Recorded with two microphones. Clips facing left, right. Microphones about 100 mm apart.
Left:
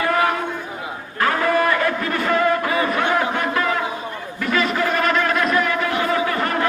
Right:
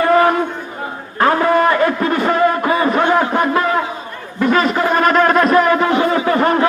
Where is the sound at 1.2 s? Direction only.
30° right (ahead or behind).